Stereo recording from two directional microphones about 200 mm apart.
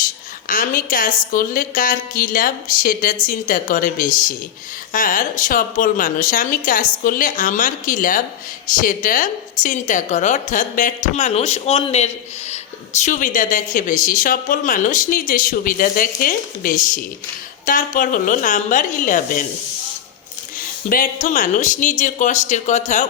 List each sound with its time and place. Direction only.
0.0 s a woman's voice: 45° left (ahead or behind)
20.6 s a woman's voice: 45° left (ahead or behind)